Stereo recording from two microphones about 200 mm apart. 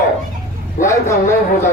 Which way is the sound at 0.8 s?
15° left (ahead or behind).